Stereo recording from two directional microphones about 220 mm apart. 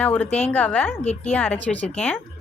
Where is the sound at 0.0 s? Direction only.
5° left (ahead or behind).